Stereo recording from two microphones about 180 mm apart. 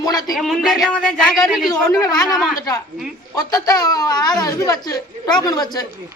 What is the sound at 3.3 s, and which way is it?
Speech, 20° left (ahead or behind).